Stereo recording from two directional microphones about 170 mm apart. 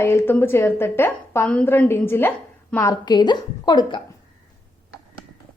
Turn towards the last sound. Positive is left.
turn(degrees=25)  # may be behind; listen again after turning